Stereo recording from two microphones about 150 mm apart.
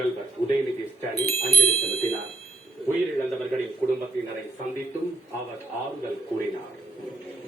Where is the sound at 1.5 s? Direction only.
10° left (ahead or behind).